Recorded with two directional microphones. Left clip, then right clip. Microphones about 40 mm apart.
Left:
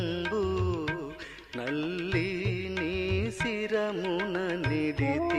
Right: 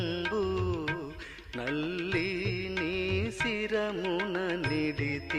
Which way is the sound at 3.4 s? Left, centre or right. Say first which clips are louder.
Left 1 dB; left.